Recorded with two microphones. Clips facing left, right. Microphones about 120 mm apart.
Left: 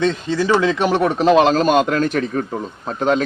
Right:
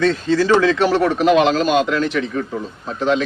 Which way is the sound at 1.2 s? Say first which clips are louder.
Left 3 dB; 35° left (ahead or behind).